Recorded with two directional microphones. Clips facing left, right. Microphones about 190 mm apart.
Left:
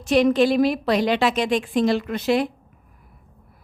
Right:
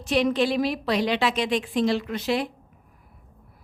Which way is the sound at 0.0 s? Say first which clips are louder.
Left 5 dB; 45° left (ahead or behind).